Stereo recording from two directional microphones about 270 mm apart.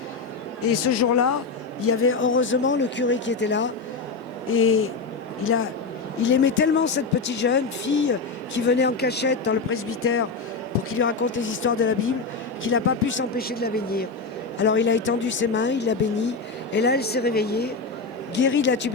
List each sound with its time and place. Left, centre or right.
0.6 s speech: left
1.8 s speech: left
11.3 s speech: left